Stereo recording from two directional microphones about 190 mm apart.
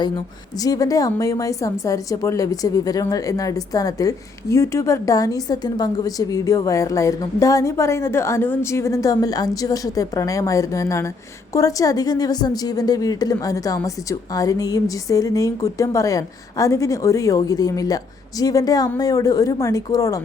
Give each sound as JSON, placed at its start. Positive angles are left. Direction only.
{"t": 0.6, "sound": "speech", "side_deg": 20}